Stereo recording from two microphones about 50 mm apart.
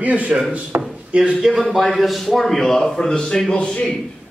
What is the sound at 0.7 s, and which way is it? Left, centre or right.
Drawer open or close, right.